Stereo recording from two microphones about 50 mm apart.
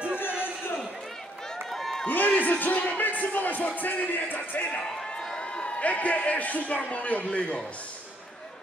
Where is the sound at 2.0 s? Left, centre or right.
Left.